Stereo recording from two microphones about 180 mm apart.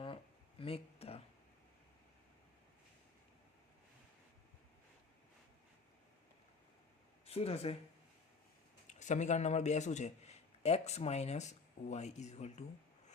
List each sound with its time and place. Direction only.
0.6 s a sound: 35° left (ahead or behind)
7.3 s speech: 35° left (ahead or behind)
8.9 s a man's voice: 40° left (ahead or behind)